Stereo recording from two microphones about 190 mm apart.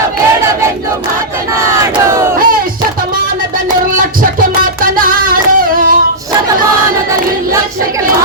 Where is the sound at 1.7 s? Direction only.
15° right (ahead or behind).